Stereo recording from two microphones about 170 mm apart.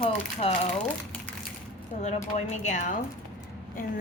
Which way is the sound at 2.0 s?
40° left (ahead or behind).